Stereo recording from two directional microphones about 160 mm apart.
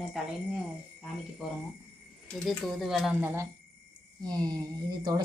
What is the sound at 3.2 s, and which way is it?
A woman's voice, 15° right (ahead or behind).